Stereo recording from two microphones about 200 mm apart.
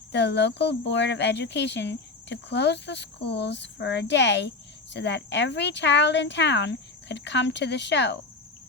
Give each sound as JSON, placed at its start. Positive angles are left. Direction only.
{"t": 0.1, "sound": "speech", "side_deg": 60}